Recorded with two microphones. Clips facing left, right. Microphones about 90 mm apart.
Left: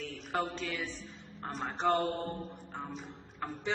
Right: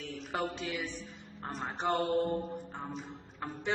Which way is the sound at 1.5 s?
Centre (ahead or behind).